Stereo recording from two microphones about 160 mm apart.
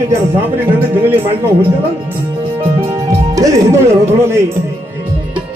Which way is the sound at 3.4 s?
20° right (ahead or behind).